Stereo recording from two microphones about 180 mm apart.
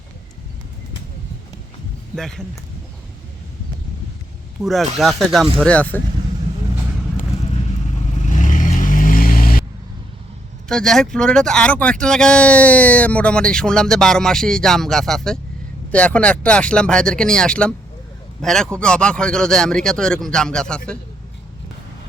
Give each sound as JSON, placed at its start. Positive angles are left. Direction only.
{"t": 2.1, "sound": "speech", "side_deg": 5}
{"t": 4.6, "sound": "speech", "side_deg": 0}
{"t": 8.2, "sound": "vehicle", "side_deg": 45}
{"t": 10.7, "sound": "speech", "side_deg": 0}